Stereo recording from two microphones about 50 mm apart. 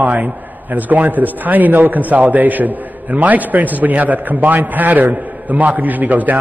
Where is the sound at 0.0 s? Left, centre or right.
Right.